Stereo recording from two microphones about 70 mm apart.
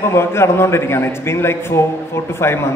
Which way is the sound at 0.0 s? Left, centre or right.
Left.